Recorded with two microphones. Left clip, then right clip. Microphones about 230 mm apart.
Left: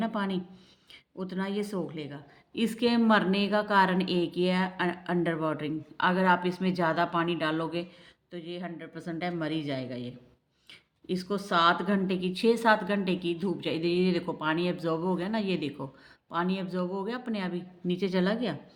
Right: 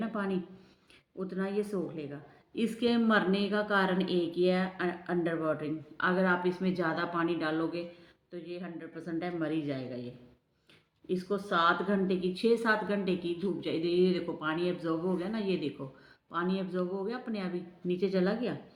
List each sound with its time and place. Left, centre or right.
0.0 s speech: left